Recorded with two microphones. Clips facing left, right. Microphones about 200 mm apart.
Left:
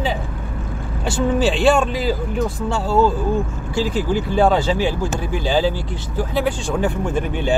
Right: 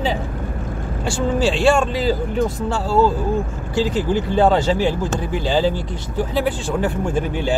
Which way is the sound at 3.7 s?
10° left (ahead or behind).